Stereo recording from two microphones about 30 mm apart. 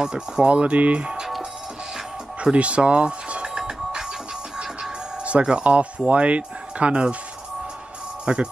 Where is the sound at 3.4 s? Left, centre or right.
Right.